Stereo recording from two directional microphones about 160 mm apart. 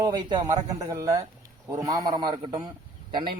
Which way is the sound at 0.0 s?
25° right (ahead or behind).